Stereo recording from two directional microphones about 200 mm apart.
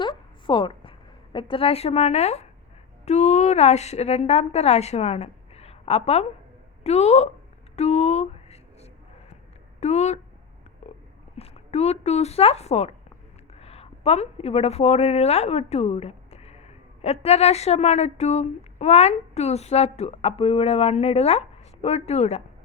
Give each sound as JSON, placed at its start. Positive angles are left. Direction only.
{"t": 0.0, "sound": "a sound", "side_deg": 25}
{"t": 3.1, "sound": "a woman's voice", "side_deg": 35}
{"t": 7.8, "sound": "a sound", "side_deg": 35}
{"t": 9.8, "sound": "a woman's voice", "side_deg": 35}
{"t": 10.8, "sound": "stomach rumble", "side_deg": 35}
{"t": 11.3, "sound": "a woman's voice", "side_deg": 30}